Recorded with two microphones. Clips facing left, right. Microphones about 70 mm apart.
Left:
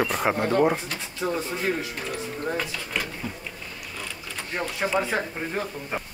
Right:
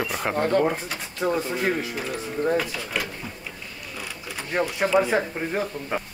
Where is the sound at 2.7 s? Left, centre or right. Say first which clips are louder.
Right 1 dB; centre.